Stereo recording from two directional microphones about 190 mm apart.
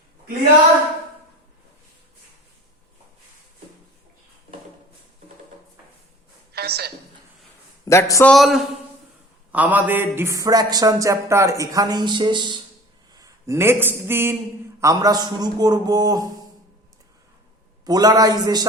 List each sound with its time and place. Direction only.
6.5 s a sound: 55° right (ahead or behind)
7.9 s a man's voice: 15° left (ahead or behind)
8.3 s a man's voice: centre (ahead or behind); by 16.3 s 20° right (ahead or behind)
17.8 s a man's voice: 20° right (ahead or behind)